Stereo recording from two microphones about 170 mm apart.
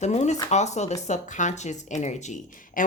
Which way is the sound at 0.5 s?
40° left (ahead or behind).